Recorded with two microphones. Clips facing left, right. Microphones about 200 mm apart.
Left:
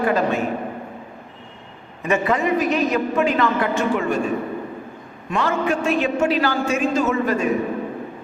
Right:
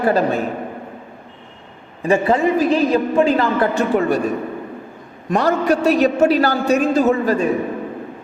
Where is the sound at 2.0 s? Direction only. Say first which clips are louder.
Right 4 dB; 30° right (ahead or behind).